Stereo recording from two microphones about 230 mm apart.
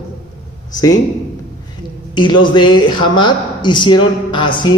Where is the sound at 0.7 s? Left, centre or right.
Centre.